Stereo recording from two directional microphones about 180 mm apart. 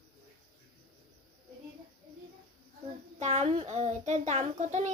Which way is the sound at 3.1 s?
40° right (ahead or behind).